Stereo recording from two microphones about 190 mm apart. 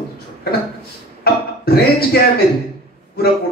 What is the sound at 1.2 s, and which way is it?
Speech, 55° left (ahead or behind).